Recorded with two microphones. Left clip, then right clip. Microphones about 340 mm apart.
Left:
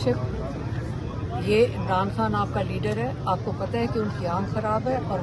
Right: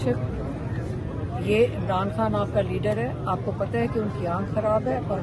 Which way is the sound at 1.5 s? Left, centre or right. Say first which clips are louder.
Left 1 dB; centre.